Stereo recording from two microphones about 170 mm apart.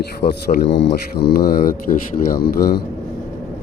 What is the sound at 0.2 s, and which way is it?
Speech, 75° left (ahead or behind).